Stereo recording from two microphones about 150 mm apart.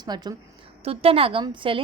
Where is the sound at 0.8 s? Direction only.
40° right (ahead or behind).